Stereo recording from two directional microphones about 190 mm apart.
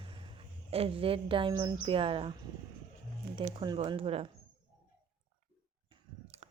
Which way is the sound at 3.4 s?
25° right (ahead or behind).